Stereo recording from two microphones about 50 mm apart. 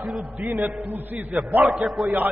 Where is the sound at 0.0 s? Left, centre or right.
Centre.